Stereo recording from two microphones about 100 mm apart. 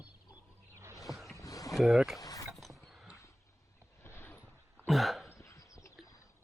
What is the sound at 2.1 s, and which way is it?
Mechanisms, 35° left (ahead or behind).